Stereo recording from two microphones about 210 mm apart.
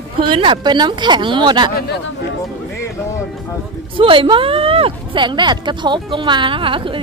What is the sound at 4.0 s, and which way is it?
Speech, 25° right (ahead or behind).